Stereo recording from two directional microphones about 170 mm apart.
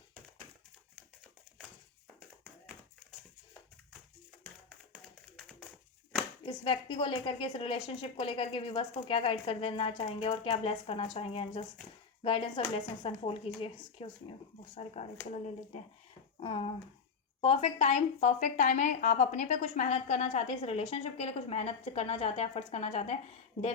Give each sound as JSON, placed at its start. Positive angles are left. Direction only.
{"t": 5.0, "sound": "tap", "side_deg": 0}
{"t": 6.4, "sound": "a woman's voice", "side_deg": 30}
{"t": 16.4, "sound": "a woman's voice", "side_deg": 30}